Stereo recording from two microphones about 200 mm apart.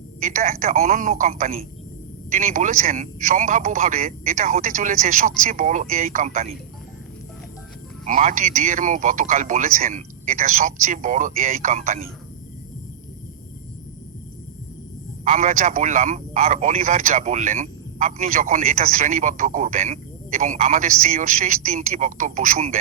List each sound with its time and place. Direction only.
0.2 s a man's voice: 45° right (ahead or behind)
8.0 s a man's voice: 40° right (ahead or behind)
15.2 s a man's voice: 40° right (ahead or behind)